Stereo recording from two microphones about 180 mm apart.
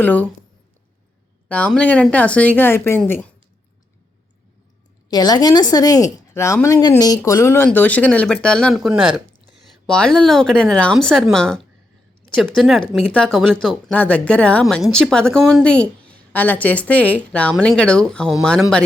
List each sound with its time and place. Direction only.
0.0 s a woman's voice: 10° left (ahead or behind)
1.5 s a woman's voice: 10° left (ahead or behind)
5.0 s a woman's voice: 20° left (ahead or behind); by 18.3 s 5° left (ahead or behind)